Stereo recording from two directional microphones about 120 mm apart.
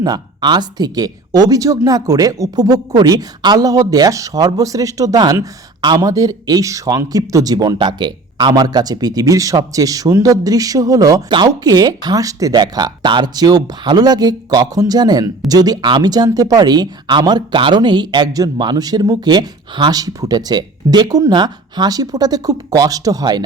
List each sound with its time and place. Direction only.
0.0 s speech: 35° right (ahead or behind)